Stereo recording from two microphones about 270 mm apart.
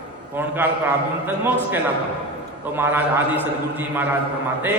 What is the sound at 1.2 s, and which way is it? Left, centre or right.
Speech, centre.